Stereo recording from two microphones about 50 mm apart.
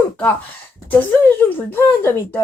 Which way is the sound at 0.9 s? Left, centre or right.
Left.